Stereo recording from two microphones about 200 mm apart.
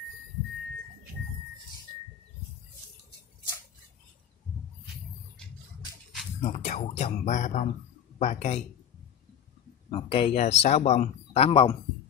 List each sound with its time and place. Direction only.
6.4 s speech: 35° left (ahead or behind)
9.8 s speech: 30° left (ahead or behind)